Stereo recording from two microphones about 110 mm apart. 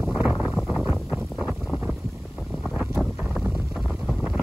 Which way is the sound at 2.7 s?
5° right (ahead or behind).